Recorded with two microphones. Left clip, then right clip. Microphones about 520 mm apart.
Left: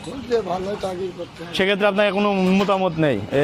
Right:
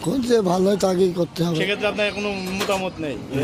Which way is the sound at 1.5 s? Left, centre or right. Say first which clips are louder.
Left 6 dB; left.